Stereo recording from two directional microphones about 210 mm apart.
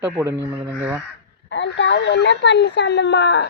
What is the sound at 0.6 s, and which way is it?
Speech, 10° right (ahead or behind).